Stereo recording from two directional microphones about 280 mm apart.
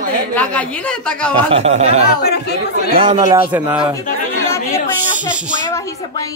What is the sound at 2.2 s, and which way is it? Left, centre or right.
Speech, left.